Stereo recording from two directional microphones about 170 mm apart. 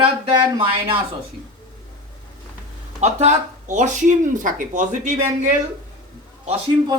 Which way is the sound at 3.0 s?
40° right (ahead or behind).